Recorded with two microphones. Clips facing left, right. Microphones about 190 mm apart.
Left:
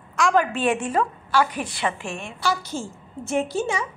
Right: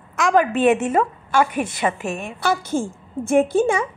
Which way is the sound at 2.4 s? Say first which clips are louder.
Right 5 dB; 50° right (ahead or behind).